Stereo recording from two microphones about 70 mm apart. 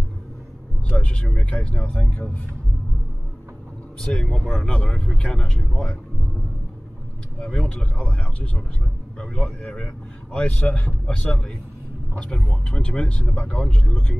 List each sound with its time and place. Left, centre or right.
0.8 s speech: centre
4.0 s speech: centre
7.3 s speech: centre